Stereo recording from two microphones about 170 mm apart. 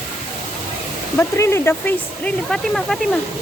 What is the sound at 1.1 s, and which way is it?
Speech, 15° left (ahead or behind).